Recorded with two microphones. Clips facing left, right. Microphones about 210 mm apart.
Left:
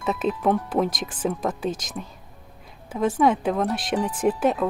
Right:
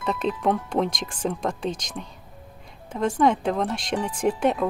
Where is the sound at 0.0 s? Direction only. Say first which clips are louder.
Left 1 dB; 5° left (ahead or behind).